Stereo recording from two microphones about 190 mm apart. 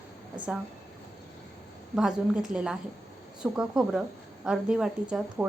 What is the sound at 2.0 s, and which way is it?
A woman's voice, 5° right (ahead or behind).